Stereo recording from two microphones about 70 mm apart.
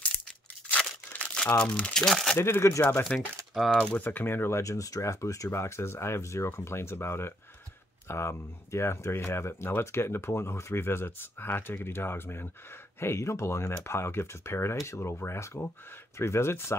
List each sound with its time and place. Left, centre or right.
0.7 s crumpling: centre
2.0 s speech: centre
2.3 s speech: left
3.1 s speech: centre
4.0 s speech: left